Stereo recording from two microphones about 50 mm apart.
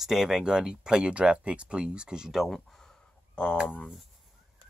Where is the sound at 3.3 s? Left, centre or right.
Left.